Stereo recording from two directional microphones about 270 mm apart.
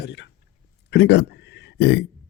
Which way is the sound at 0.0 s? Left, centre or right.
Left.